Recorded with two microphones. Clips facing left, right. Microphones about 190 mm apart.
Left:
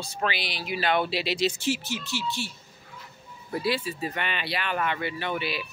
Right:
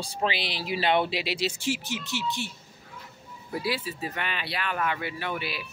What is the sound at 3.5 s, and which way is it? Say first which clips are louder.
Speech: left 3 dB; 5° right (ahead or behind).